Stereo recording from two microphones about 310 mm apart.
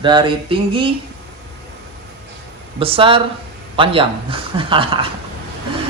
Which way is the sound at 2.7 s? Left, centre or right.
Centre.